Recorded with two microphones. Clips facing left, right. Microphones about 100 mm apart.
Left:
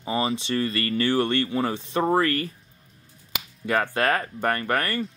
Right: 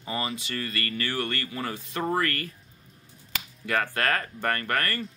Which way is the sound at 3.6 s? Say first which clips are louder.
Left 4 dB; 20° left (ahead or behind).